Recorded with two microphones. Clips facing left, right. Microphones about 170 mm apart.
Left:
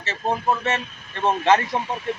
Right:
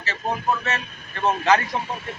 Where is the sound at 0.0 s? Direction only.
25° left (ahead or behind).